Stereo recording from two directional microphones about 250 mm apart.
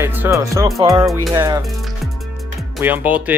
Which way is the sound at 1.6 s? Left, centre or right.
Centre.